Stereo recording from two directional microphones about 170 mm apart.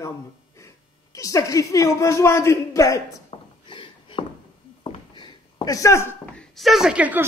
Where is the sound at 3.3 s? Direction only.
30° left (ahead or behind).